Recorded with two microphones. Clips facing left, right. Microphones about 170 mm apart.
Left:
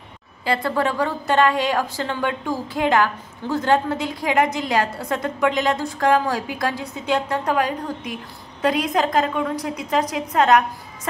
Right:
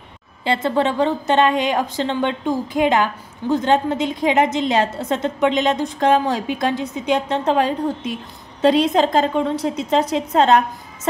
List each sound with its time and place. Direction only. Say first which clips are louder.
0.5 s a woman's voice: right 3 dB; 25° right (ahead or behind)